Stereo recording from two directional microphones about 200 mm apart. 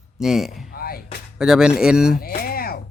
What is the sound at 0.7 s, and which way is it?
Music, 50° left (ahead or behind).